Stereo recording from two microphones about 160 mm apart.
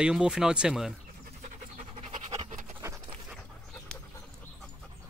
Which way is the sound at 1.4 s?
45° right (ahead or behind).